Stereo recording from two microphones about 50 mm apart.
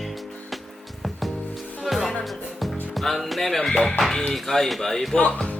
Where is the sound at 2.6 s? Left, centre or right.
Centre.